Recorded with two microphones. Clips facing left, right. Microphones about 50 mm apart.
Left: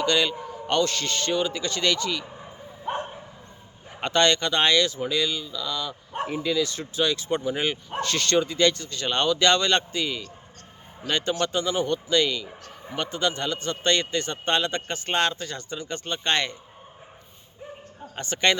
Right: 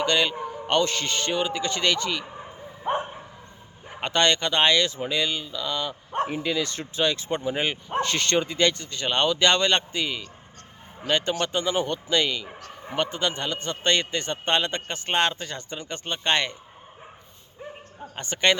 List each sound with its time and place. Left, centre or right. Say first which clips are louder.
0.0 s speech: even; right
2.8 s bow-wow: right 3 dB; right
4.0 s speech: left 1 dB; centre
18.2 s speech: even; centre